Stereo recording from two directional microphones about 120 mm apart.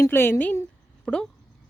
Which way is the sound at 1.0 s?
5° left (ahead or behind).